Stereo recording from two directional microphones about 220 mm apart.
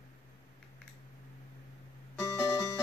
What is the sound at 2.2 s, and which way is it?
Music, 15° left (ahead or behind).